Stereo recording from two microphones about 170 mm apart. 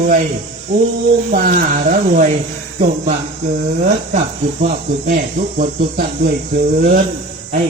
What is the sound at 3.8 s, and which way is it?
Speech, 40° right (ahead or behind).